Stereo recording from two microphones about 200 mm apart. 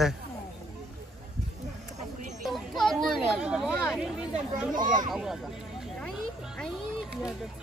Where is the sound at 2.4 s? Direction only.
Centre (ahead or behind).